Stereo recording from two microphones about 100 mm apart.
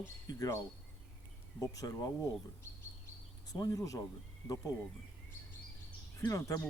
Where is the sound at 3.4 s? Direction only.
35° left (ahead or behind).